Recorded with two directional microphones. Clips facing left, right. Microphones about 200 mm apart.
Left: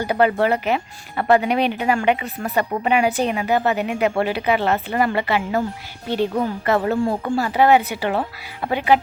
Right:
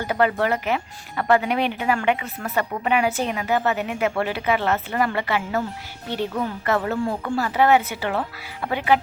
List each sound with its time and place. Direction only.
0.0 s a woman's voice: 15° left (ahead or behind)